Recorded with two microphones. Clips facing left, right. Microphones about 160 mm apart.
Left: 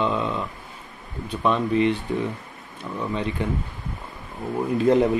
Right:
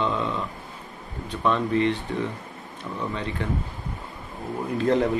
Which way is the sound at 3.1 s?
15° left (ahead or behind).